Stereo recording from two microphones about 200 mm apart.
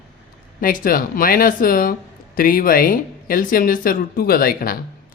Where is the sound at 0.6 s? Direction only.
45° left (ahead or behind).